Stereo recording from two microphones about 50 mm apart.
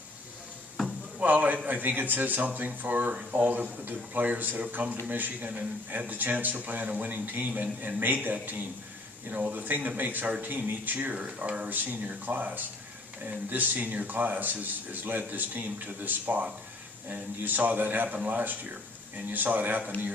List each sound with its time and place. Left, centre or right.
1.2 s speech: right
11.7 s speech: right